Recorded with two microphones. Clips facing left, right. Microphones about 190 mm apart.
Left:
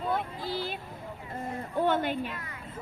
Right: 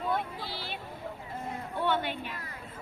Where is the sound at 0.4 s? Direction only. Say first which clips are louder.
Left 6 dB; 45° left (ahead or behind).